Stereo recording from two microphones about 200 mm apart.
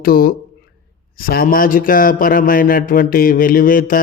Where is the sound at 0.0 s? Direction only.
50° left (ahead or behind).